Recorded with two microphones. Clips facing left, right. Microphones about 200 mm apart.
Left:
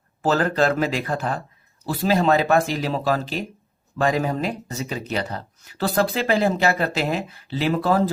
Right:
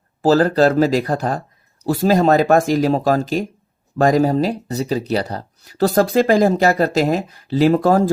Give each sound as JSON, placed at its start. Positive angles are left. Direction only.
{"t": 0.2, "sound": "speech", "side_deg": -35}